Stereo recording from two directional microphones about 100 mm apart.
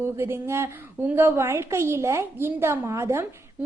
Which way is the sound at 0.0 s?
25° right (ahead or behind).